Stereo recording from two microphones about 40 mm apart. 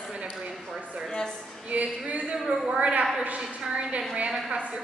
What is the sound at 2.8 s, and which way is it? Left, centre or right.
Speech, right.